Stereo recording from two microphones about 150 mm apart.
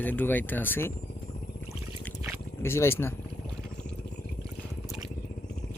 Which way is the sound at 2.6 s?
15° left (ahead or behind).